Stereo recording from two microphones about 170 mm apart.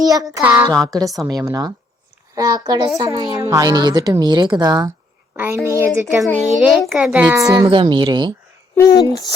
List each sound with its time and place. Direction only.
0.0 s a woman's voice: 20° right (ahead or behind)
0.3 s speech: 5° right (ahead or behind)
0.9 s a woman's voice: 20° right (ahead or behind)
6.5 s a woman's voice: centre (ahead or behind); by 8.3 s 25° right (ahead or behind)
8.7 s speech: 20° left (ahead or behind)